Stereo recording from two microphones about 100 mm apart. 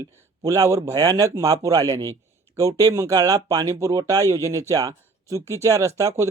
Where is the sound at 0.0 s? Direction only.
30° right (ahead or behind).